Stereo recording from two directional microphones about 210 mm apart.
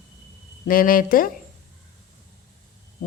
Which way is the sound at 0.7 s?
40° left (ahead or behind).